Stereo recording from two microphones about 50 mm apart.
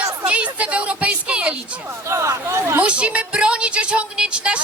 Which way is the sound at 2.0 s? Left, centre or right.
Right.